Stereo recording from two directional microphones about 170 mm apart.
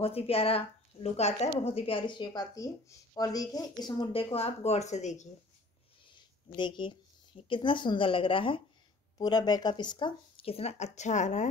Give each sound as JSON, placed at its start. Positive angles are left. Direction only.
{"t": 0.0, "sound": "speech", "side_deg": 35}
{"t": 6.0, "sound": "speech", "side_deg": 30}